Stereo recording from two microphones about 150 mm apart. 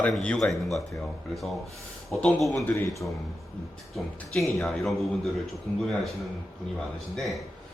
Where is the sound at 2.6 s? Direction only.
15° left (ahead or behind).